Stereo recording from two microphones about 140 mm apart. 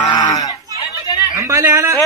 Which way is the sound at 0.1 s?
25° left (ahead or behind).